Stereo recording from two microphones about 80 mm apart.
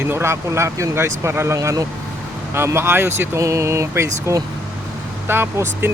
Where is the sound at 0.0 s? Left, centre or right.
Right.